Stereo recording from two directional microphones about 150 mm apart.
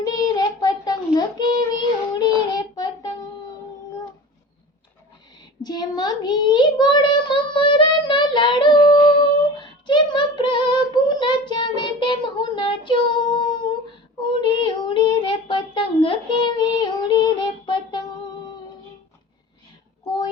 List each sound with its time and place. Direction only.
0.0 s child singing: 25° left (ahead or behind)
5.6 s child singing: 25° left (ahead or behind)